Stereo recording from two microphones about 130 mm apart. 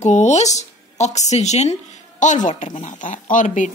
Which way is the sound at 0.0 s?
65° left (ahead or behind).